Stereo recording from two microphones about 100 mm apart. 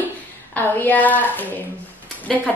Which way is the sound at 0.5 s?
20° left (ahead or behind).